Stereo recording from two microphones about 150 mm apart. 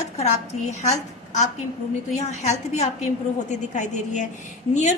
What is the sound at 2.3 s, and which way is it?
A woman's voice, 50° left (ahead or behind).